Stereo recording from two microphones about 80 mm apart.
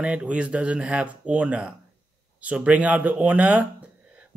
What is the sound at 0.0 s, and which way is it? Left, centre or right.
Speech, centre.